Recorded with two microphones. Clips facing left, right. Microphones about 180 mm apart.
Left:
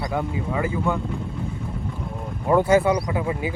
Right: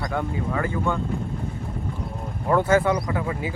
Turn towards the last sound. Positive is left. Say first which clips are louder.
# left 2 dB
turn(degrees=20)  # may be behind; listen again after turning